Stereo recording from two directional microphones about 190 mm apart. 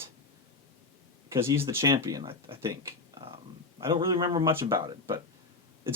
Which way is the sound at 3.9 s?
25° right (ahead or behind).